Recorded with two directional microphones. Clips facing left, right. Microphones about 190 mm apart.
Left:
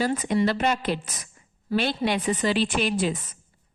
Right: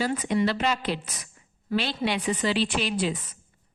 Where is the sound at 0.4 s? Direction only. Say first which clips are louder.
Left 2 dB; 50° left (ahead or behind).